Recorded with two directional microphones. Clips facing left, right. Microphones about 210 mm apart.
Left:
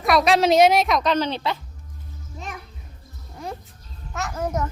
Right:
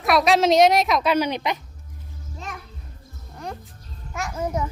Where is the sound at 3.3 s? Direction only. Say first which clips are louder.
Left 1 dB; 5° left (ahead or behind).